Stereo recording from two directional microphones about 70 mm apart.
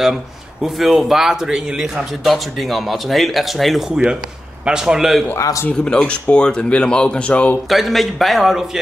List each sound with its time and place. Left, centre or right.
0.0 s a man's voice: centre
5.4 s a man's voice: left
5.7 s speech: centre
7.7 s speech: centre